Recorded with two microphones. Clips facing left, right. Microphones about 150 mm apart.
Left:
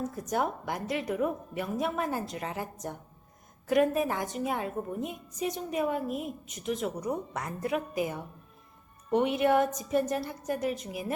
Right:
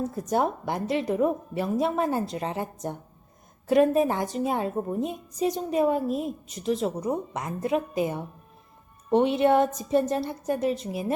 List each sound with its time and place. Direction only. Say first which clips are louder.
0.0 s a woman's voice: right 5 dB; 30° right (ahead or behind)